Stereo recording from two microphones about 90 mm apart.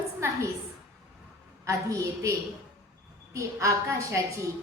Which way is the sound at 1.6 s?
35° right (ahead or behind).